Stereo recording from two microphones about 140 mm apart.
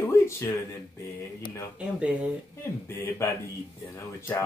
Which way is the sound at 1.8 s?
10° right (ahead or behind).